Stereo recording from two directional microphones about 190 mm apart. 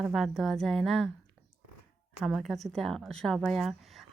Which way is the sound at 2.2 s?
Centre (ahead or behind).